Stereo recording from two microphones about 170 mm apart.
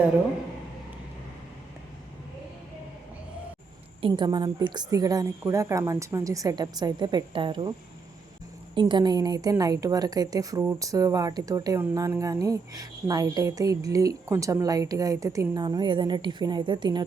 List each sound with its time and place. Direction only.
4.0 s a woman's voice: 25° right (ahead or behind)
8.7 s a woman's voice: 25° right (ahead or behind)